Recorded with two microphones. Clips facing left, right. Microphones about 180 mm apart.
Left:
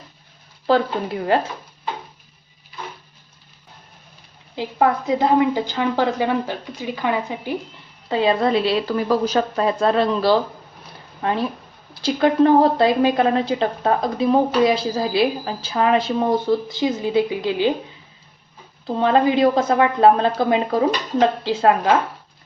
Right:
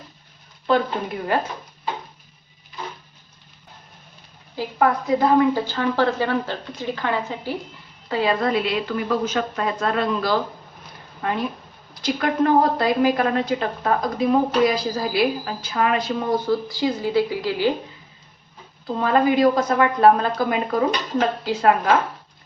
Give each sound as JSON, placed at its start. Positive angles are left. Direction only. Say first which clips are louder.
{"t": 0.7, "sound": "a woman's voice", "louder": "left 2 dB", "side_deg": 30}
{"t": 4.5, "sound": "a woman's voice", "louder": "left 1 dB", "side_deg": 20}
{"t": 18.9, "sound": "a woman's voice", "louder": "left 2 dB", "side_deg": 25}